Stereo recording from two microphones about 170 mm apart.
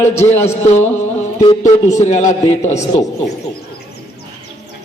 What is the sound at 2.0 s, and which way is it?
Speech, 45° left (ahead or behind).